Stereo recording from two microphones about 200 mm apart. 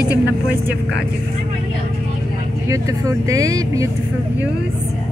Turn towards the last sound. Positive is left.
turn(degrees=-15)  # may be behind; listen again after turning